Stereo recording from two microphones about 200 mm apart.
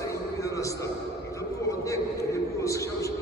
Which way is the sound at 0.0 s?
15° left (ahead or behind).